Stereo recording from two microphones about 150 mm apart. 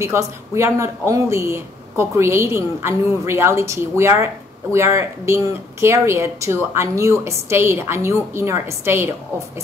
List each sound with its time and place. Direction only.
0.0 s speech: 20° right (ahead or behind)